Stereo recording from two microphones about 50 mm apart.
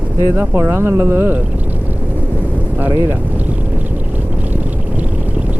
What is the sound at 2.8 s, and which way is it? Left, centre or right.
Speech, right.